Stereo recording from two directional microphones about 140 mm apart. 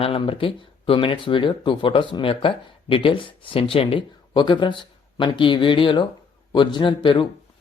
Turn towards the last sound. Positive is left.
turn(degrees=35)  # may be behind; listen again after turning